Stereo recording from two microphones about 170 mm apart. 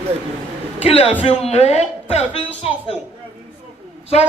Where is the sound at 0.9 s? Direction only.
35° left (ahead or behind).